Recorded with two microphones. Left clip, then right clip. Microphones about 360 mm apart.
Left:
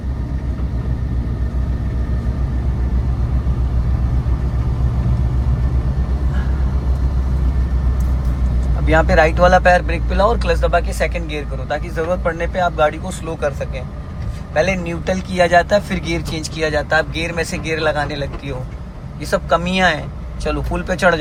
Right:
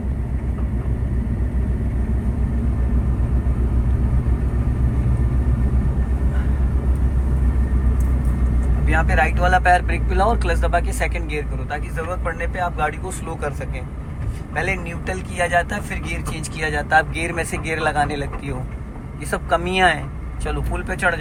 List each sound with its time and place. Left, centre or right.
8.9 s speech: centre